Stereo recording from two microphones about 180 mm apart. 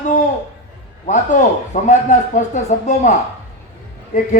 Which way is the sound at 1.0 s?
45° left (ahead or behind).